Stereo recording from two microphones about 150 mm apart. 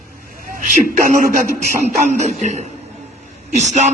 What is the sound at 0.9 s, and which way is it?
Speech, 60° right (ahead or behind).